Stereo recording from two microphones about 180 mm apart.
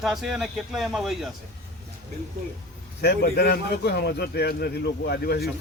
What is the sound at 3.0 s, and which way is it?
A man's voice, 65° left (ahead or behind).